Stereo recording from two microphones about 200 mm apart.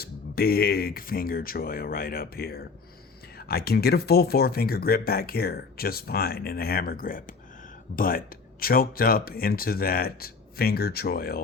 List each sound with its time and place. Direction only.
0.0 s speech: 50° left (ahead or behind)